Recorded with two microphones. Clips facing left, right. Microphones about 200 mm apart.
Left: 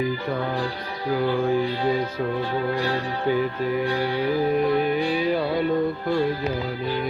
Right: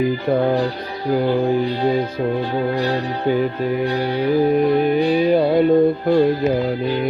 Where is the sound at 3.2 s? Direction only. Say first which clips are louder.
Right 4 dB; 25° right (ahead or behind).